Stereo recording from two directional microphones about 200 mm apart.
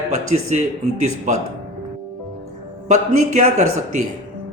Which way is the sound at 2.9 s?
35° right (ahead or behind).